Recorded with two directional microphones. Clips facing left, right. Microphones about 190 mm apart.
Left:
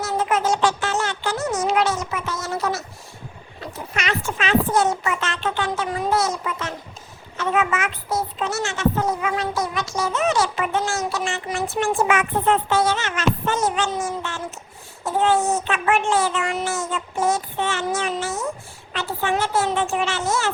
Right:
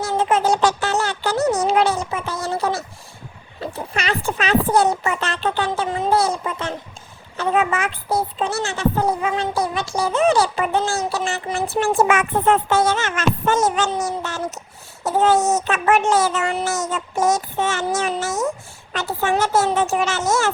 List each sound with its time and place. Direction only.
0.0 s a woman's voice: 30° right (ahead or behind)
15.2 s child singing: 40° right (ahead or behind)
15.6 s a woman's voice: 40° right (ahead or behind)
16.9 s child singing: 45° right (ahead or behind)